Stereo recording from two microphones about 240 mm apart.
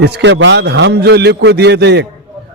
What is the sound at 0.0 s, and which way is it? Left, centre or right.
A man's voice, right.